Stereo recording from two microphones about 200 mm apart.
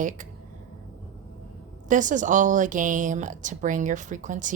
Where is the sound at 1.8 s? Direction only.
40° right (ahead or behind).